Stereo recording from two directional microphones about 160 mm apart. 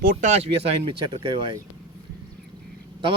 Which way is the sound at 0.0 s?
65° right (ahead or behind).